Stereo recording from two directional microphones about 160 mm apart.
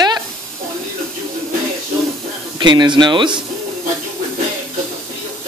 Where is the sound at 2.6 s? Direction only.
30° right (ahead or behind).